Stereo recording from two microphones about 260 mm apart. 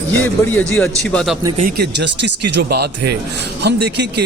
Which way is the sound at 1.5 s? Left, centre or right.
Right.